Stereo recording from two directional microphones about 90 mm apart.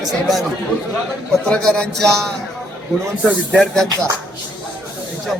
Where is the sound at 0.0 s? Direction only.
Centre (ahead or behind).